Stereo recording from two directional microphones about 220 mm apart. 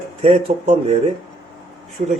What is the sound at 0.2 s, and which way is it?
Speech, 30° right (ahead or behind).